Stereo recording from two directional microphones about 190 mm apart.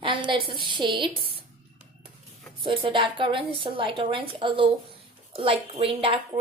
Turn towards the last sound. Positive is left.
turn(degrees=-30)  # may be behind; listen again after turning